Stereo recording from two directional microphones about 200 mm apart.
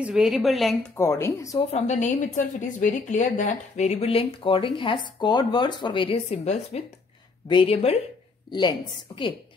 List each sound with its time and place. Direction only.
0.0 s a woman's voice: 5° right (ahead or behind)
0.9 s a woman's voice: 15° left (ahead or behind)
1.7 s a woman's voice: 35° left (ahead or behind)